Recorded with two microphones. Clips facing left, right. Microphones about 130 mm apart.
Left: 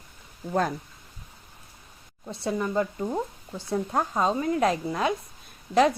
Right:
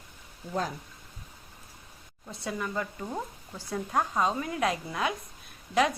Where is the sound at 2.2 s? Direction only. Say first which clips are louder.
Left 6 dB; 30° left (ahead or behind).